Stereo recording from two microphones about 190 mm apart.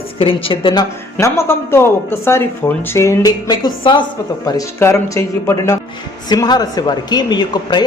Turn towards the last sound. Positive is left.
turn(degrees=20)  # may be behind; listen again after turning